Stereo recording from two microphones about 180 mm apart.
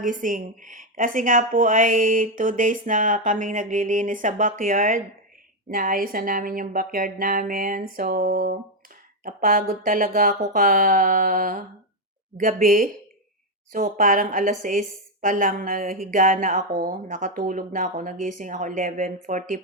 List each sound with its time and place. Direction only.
0.0 s a woman's voice: 50° right (ahead or behind)